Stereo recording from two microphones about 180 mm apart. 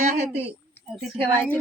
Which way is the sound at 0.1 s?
35° right (ahead or behind).